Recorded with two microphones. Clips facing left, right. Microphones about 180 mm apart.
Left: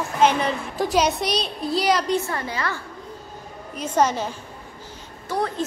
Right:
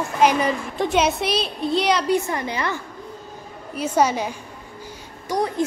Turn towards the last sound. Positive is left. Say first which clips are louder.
# right 3 dB
turn(degrees=-15)  # may be behind; listen again after turning